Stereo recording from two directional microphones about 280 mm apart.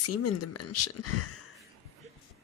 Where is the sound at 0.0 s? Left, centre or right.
Left.